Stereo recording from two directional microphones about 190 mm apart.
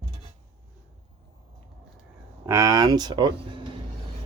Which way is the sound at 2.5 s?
15° right (ahead or behind).